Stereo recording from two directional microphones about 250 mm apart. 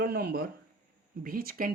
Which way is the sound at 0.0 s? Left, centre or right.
Right.